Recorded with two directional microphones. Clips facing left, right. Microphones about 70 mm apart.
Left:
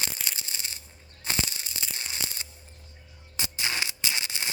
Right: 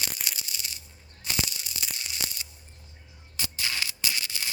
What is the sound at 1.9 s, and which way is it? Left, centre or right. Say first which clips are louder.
Crushing: left 1 dB; left.